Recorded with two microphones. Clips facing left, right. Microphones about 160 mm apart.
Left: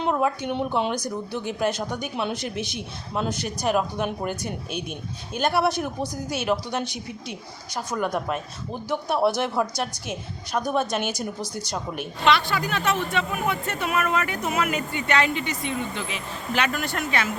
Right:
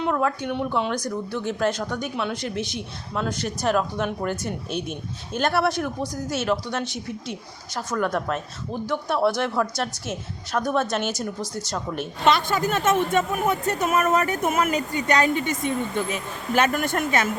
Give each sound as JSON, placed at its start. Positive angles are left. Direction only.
{"t": 0.0, "sound": "a woman's voice", "side_deg": 20}
{"t": 2.3, "sound": "speech", "side_deg": -20}
{"t": 3.2, "sound": "a woman's voice", "side_deg": 20}
{"t": 6.8, "sound": "speech", "side_deg": -25}
{"t": 7.9, "sound": "a woman's voice", "side_deg": 10}
{"t": 9.7, "sound": "a woman's voice", "side_deg": 10}
{"t": 12.2, "sound": "speech", "side_deg": -45}